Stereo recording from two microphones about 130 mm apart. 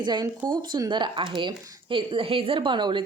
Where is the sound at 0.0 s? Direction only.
35° right (ahead or behind).